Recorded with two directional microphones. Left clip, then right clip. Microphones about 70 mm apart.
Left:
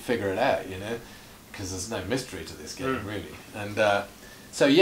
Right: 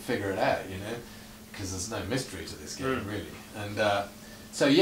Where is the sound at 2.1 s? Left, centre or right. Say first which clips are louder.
Left 3 dB; left.